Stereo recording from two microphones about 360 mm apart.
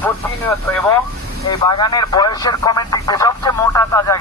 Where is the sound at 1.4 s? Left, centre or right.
Centre.